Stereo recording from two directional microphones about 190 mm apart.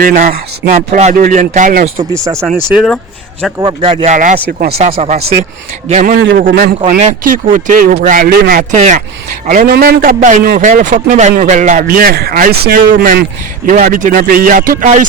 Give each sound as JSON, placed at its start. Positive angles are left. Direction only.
{"t": 0.0, "sound": "a man's voice", "side_deg": -45}
{"t": 2.1, "sound": "speech", "side_deg": -15}
{"t": 2.7, "sound": "speech", "side_deg": 0}
{"t": 3.6, "sound": "speech", "side_deg": -25}
{"t": 4.1, "sound": "speech", "side_deg": -40}
{"t": 6.1, "sound": "a man's voice", "side_deg": -60}
{"t": 6.8, "sound": "a man's voice", "side_deg": -40}